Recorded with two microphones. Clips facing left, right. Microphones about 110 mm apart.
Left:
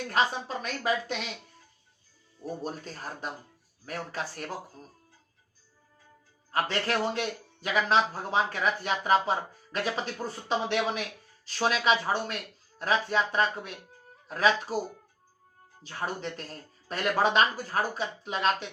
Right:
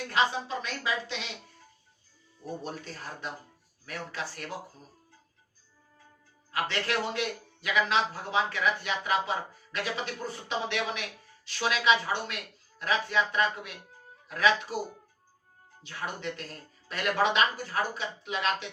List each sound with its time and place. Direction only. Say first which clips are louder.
0.1 s speech: even; 45° left (ahead or behind)
2.6 s a man's voice: left 2 dB; 40° left (ahead or behind)
6.5 s a man's voice: left 2 dB; 40° left (ahead or behind)
15.8 s a man's voice: left 2 dB; 35° left (ahead or behind)